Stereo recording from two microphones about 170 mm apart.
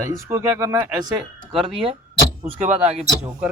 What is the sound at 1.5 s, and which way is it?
Speech, 30° right (ahead or behind).